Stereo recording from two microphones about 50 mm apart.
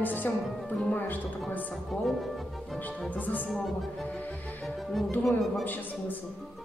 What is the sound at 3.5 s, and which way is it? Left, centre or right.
Speech, centre.